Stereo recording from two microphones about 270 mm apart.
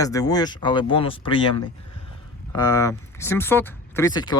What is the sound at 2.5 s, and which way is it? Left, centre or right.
Speech, centre.